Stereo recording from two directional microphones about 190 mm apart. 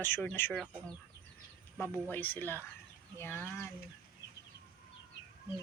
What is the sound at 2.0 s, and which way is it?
Speech, 10° left (ahead or behind).